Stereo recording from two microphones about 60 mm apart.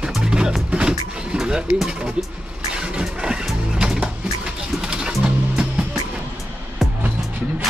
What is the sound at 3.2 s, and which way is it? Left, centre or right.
Speech, centre.